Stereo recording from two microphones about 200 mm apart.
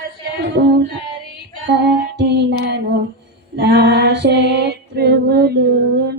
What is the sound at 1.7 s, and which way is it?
Female singing, 60° right (ahead or behind).